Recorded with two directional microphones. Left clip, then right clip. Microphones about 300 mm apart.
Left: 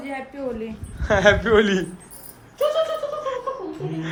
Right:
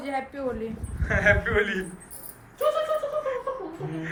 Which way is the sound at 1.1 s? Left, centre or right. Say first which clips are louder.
Left 6 dB; centre.